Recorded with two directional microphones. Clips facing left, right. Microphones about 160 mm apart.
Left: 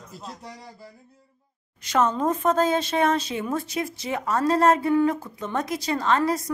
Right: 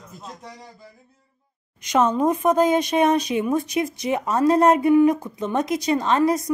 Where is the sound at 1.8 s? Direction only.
15° right (ahead or behind).